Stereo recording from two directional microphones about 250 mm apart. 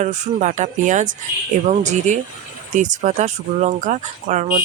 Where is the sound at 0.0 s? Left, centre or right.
Right.